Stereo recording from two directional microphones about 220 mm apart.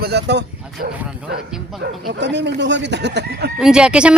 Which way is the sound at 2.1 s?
55° right (ahead or behind).